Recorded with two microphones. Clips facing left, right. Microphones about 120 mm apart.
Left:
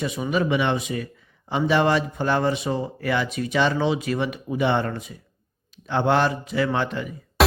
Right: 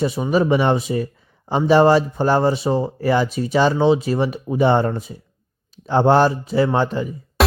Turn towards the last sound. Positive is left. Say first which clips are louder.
# even
turn(degrees=0)  # may be behind; listen again after turning